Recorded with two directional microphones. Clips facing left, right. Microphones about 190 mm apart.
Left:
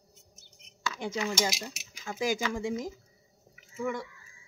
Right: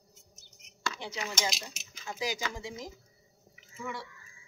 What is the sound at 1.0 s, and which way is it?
A woman's voice, 50° left (ahead or behind).